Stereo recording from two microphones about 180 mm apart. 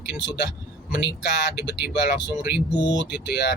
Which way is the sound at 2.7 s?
25° left (ahead or behind).